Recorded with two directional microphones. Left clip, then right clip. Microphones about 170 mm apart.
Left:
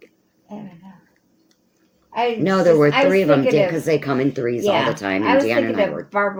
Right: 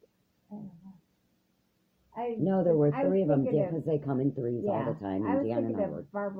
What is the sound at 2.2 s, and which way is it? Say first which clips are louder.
Speech: left 12 dB; 30° left (ahead or behind).